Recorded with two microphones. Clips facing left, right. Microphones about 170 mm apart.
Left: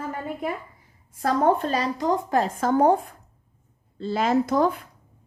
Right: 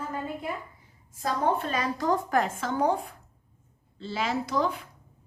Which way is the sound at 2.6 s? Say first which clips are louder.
Left 7 dB; 50° left (ahead or behind).